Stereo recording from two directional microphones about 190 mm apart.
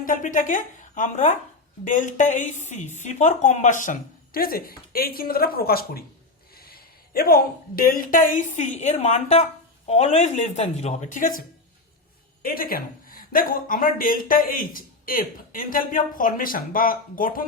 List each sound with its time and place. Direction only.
0.0 s speech: 45° left (ahead or behind)